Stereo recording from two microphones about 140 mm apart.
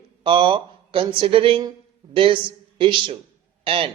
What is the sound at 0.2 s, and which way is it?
A woman's voice, 40° right (ahead or behind).